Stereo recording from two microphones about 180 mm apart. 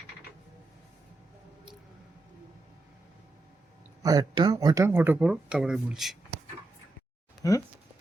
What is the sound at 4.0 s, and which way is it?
Speech, 20° right (ahead or behind).